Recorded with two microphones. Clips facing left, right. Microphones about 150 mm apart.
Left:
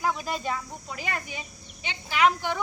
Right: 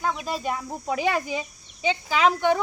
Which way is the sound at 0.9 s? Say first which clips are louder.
Right 11 dB; 90° right.